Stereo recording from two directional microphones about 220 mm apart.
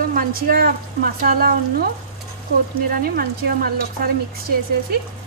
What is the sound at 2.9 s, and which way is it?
Speech, 40° right (ahead or behind).